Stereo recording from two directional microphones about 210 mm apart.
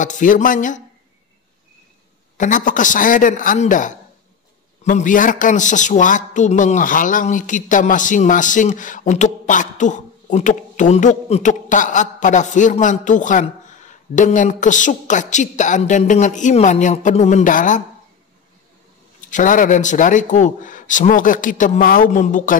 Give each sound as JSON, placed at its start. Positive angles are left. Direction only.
{"t": 0.0, "sound": "speech", "side_deg": 40}
{"t": 2.3, "sound": "speech", "side_deg": 40}
{"t": 19.3, "sound": "speech", "side_deg": 40}